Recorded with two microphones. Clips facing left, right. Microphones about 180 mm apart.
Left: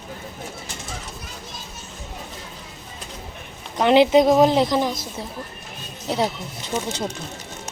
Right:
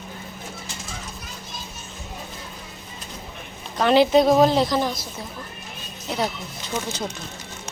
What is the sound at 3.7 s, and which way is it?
Speech, 20° left (ahead or behind).